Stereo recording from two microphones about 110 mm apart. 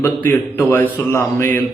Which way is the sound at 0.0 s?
20° left (ahead or behind).